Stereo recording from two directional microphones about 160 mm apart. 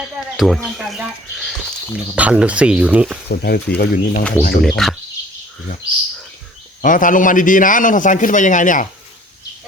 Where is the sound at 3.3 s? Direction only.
80° left; by 4.2 s 60° left (ahead or behind).